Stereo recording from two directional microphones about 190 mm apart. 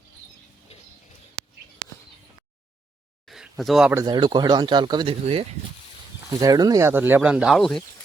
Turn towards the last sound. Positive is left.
turn(degrees=0)  # may be behind; listen again after turning